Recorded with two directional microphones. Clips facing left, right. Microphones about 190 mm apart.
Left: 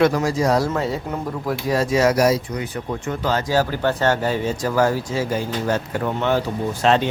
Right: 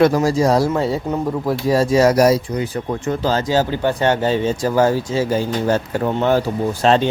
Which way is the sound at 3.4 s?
20° right (ahead or behind).